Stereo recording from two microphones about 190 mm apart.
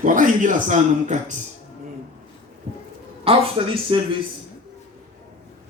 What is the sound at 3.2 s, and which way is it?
Speech, 30° right (ahead or behind).